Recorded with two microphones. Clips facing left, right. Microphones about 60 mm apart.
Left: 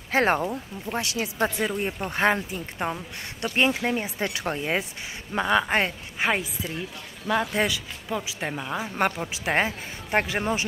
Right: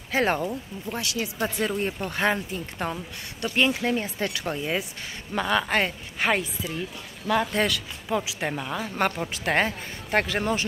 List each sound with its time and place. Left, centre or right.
0.1 s speech: left
1.8 s speech: centre
2.0 s speech: left
2.5 s speech: centre
5.3 s speech: left
5.9 s speech: centre
8.1 s speech: centre
8.5 s speech: centre